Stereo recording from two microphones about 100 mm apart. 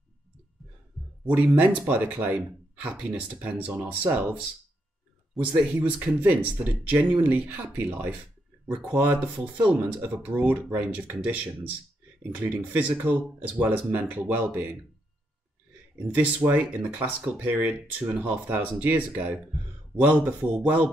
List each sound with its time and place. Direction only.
1.2 s speech: 15° right (ahead or behind)
5.4 s speech: 15° right (ahead or behind)
16.2 s speech: 15° right (ahead or behind)